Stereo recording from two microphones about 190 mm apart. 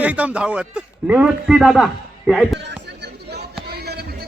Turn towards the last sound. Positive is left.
turn(degrees=-55)  # may be behind; listen again after turning